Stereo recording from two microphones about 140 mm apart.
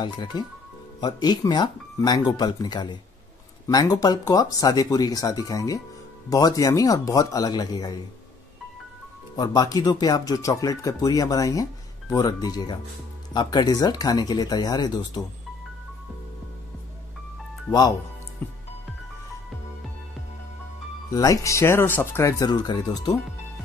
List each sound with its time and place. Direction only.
0.0 s speech: 35° left (ahead or behind)
9.4 s speech: 30° left (ahead or behind)
17.6 s speech: 30° left (ahead or behind)
21.1 s speech: 25° left (ahead or behind)